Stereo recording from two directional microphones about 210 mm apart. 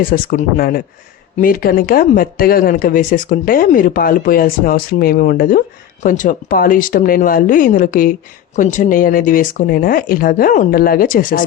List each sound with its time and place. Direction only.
0.0 s speech: 40° left (ahead or behind)